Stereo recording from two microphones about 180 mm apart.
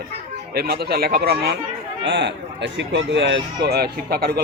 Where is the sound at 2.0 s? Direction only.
80° right.